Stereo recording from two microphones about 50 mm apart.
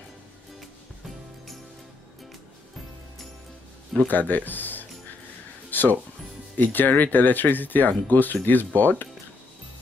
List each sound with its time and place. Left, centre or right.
4.1 s speech: left
5.7 s music: left
6.5 s speech: left